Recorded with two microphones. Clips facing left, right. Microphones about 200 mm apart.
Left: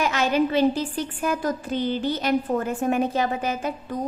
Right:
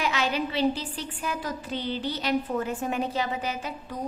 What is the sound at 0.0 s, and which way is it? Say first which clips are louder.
Speech: left 6 dB; 45° left (ahead or behind).